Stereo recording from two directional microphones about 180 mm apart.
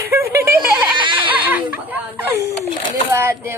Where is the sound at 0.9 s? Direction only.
25° right (ahead or behind).